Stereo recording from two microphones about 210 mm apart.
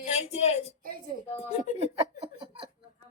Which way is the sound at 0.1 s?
30° left (ahead or behind).